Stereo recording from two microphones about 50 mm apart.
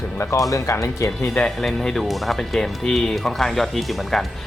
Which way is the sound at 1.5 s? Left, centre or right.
Centre.